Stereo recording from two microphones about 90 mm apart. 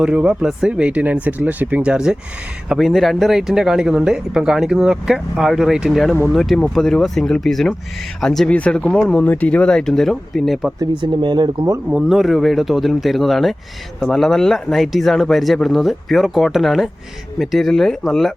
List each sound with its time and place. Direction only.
0.0 s speech: 10° right (ahead or behind)
10.8 s speech: 60° right (ahead or behind)
11.9 s speech: 10° right (ahead or behind)